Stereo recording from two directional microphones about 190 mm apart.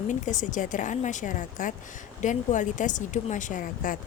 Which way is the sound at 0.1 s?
40° left (ahead or behind).